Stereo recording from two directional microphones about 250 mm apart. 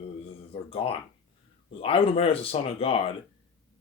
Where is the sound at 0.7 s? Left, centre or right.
Left.